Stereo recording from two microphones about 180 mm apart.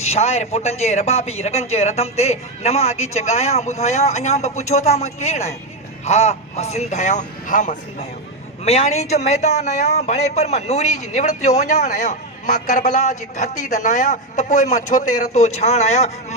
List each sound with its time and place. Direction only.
0.0 s a man's voice: 35° left (ahead or behind)